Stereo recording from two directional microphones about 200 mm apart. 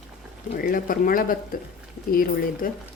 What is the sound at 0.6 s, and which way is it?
Speech, 45° left (ahead or behind).